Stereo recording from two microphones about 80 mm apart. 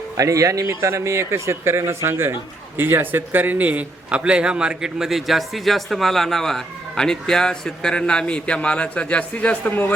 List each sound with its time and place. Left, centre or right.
0.2 s a man's voice: right; by 9.9 s left